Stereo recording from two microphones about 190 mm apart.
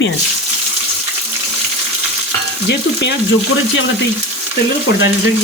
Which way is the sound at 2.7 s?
80° left.